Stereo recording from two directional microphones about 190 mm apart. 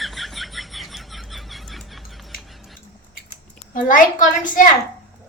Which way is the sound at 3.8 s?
45° left (ahead or behind).